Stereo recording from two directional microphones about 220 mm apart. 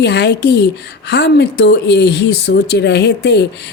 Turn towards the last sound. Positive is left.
turn(degrees=50)  # may be behind; listen again after turning